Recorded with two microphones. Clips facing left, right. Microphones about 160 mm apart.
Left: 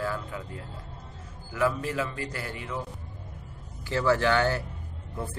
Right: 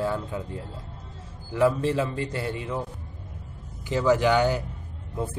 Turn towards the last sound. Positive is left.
turn(degrees=-20)  # may be behind; listen again after turning